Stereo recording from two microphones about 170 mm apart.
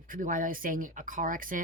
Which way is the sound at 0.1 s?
50° right (ahead or behind).